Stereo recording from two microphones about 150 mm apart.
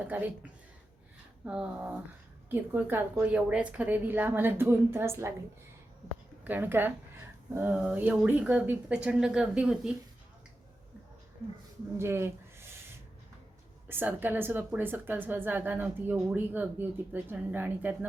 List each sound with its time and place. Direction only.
0.0 s a woman's voice: 10° right (ahead or behind)
1.5 s a woman's voice: 10° right (ahead or behind)
6.4 s a woman's voice: 10° right (ahead or behind)
11.9 s speech: 15° right (ahead or behind)
13.8 s a woman's voice: 15° right (ahead or behind)